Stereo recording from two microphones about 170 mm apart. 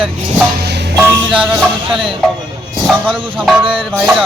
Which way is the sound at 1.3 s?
5° right (ahead or behind).